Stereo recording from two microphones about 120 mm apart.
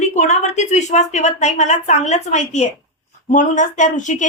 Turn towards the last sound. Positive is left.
turn(degrees=90)